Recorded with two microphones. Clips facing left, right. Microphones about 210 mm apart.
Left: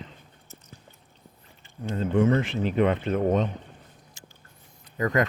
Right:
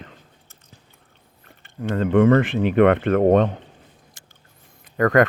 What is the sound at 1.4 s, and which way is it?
Speech, 60° right (ahead or behind).